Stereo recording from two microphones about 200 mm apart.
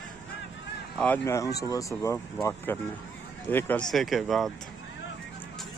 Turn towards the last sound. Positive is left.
turn(degrees=0)  # may be behind; listen again after turning